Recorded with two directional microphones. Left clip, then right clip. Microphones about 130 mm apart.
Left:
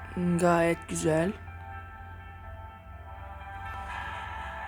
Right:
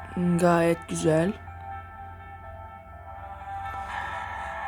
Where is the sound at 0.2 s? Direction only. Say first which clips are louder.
Right 2 dB; 30° right (ahead or behind).